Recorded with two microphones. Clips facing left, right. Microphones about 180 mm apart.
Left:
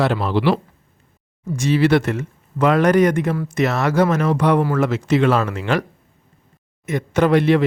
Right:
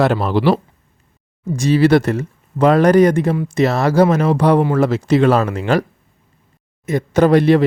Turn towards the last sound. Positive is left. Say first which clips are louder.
# right 3 dB
turn(degrees=-35)  # may be behind; listen again after turning